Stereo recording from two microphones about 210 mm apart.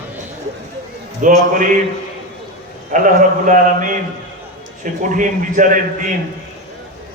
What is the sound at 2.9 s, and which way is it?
A man's voice, 40° right (ahead or behind).